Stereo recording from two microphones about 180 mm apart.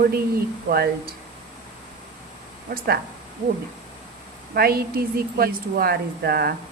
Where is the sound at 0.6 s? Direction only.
55° right (ahead or behind).